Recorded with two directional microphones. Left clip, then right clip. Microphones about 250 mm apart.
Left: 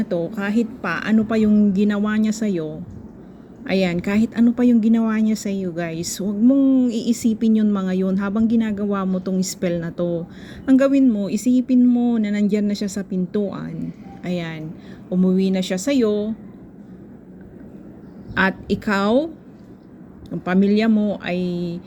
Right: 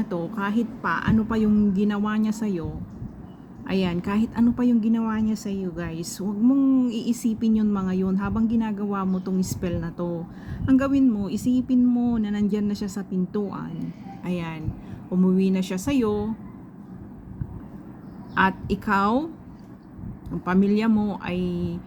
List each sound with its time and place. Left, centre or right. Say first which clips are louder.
0.3 s a woman's voice: left 4 dB; centre
18.3 s a woman's voice: left 2 dB; centre
20.4 s a woman's voice: left 4 dB; centre